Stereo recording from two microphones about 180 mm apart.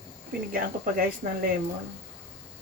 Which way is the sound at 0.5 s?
55° right (ahead or behind).